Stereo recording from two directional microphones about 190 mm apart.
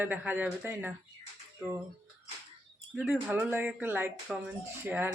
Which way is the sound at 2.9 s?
5° right (ahead or behind).